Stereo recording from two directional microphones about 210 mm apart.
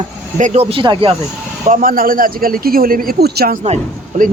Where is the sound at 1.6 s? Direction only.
40° right (ahead or behind).